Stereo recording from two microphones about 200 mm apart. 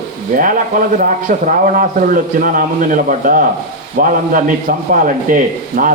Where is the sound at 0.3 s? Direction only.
45° right (ahead or behind).